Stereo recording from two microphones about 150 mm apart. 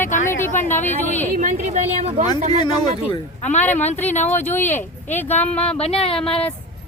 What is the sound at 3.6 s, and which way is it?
Speech, 10° left (ahead or behind).